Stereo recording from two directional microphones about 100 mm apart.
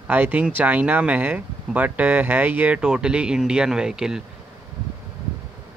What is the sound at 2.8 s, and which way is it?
Speech, 10° right (ahead or behind).